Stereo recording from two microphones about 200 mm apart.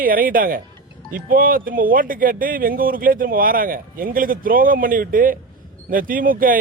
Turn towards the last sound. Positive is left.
turn(degrees=-45)  # may be behind; listen again after turning